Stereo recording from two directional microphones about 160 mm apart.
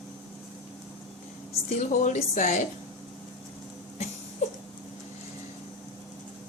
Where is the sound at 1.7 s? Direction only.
50° left (ahead or behind).